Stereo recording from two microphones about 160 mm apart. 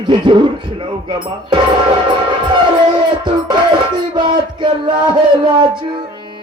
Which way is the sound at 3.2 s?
30° right (ahead or behind).